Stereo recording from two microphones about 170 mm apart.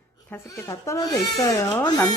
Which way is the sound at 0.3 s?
15° left (ahead or behind).